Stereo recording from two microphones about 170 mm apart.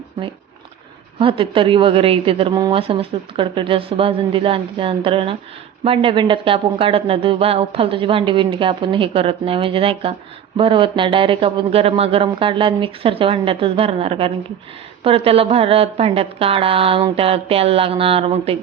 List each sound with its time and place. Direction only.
1.2 s speech: 30° right (ahead or behind)